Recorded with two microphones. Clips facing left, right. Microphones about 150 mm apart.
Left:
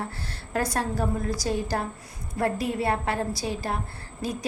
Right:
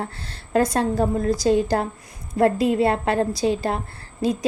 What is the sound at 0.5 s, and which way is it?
A woman's voice, 25° right (ahead or behind).